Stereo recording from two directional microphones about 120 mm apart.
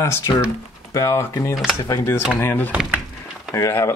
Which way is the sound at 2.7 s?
10° right (ahead or behind).